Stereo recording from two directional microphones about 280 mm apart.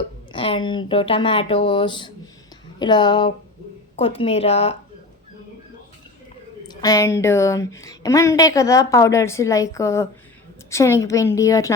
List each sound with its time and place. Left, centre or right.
0.3 s a woman's voice: centre
6.7 s a woman's voice: centre